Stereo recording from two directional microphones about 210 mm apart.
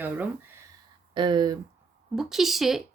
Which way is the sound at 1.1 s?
20° right (ahead or behind).